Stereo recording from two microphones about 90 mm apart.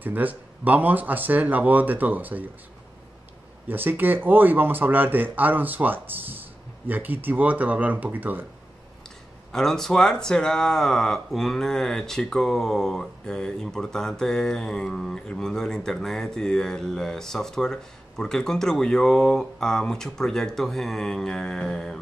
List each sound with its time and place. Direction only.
0.0 s speech: 20° right (ahead or behind)
3.6 s speech: 20° right (ahead or behind)
9.5 s speech: 5° left (ahead or behind)